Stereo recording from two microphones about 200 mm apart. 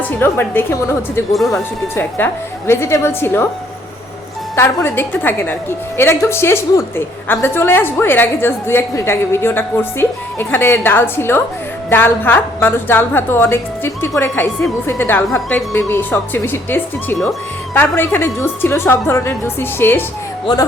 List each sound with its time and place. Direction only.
0.0 s a woman's voice: 10° left (ahead or behind)
1.3 s a woman's voice: centre (ahead or behind)
4.5 s a woman's voice: 10° left (ahead or behind)
20.5 s a man's voice: 20° left (ahead or behind)